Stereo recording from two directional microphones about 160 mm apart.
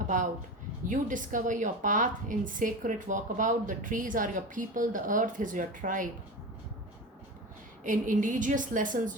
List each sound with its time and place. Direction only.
0.1 s a woman's voice: 55° right (ahead or behind)
7.9 s a woman's voice: 55° right (ahead or behind)